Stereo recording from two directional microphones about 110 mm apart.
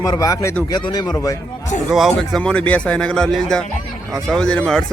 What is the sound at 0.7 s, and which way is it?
Speech, 40° left (ahead or behind).